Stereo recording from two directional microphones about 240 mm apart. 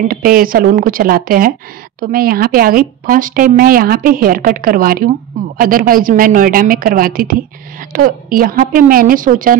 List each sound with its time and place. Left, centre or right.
0.1 s speech: right